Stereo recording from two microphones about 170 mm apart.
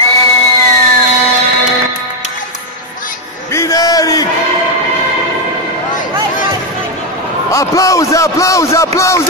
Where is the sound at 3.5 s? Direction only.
20° left (ahead or behind).